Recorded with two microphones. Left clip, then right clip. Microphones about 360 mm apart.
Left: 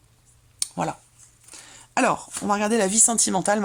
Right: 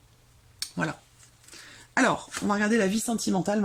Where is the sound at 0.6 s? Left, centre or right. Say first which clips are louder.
Left 4 dB; centre.